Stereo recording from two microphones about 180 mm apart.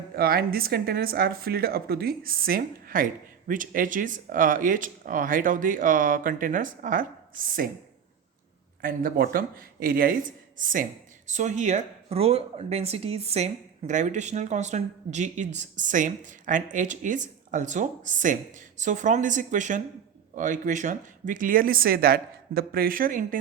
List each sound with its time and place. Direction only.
0.2 s speech: 55° right (ahead or behind)
8.8 s speech: 50° right (ahead or behind)